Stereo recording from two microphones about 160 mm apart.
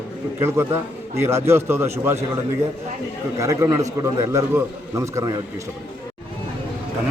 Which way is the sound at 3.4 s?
20° right (ahead or behind).